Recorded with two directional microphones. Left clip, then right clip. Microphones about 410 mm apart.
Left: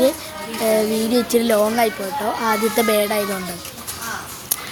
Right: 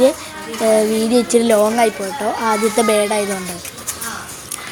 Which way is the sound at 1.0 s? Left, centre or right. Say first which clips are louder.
Right 4 dB; left.